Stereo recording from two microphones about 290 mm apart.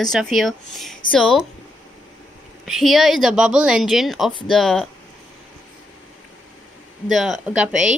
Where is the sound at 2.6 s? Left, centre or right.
Centre.